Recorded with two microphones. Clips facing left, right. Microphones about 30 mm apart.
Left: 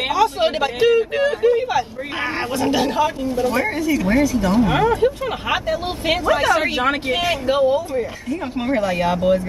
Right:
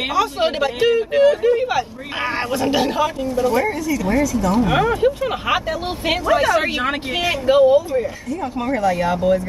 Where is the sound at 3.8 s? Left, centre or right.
Left.